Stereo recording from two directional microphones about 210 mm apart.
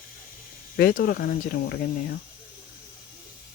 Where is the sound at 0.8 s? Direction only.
45° left (ahead or behind).